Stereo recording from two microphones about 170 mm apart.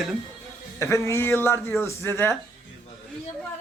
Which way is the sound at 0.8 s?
15° left (ahead or behind).